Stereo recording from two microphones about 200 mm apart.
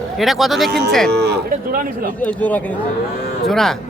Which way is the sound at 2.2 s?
5° left (ahead or behind).